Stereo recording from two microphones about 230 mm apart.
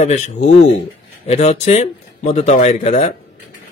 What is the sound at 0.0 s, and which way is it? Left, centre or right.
A man's voice, left.